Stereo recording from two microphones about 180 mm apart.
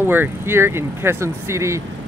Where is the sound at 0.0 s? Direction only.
10° right (ahead or behind).